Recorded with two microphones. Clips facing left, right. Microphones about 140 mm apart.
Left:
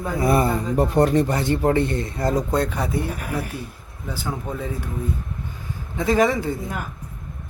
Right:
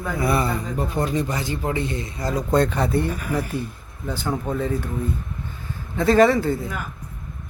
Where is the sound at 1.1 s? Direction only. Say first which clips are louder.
Left 5 dB; 60° left (ahead or behind).